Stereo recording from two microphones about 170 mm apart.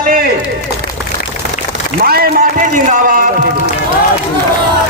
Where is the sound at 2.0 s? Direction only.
60° right (ahead or behind).